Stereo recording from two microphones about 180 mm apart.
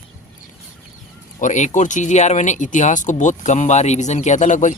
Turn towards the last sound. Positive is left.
turn(degrees=40)  # may be behind; listen again after turning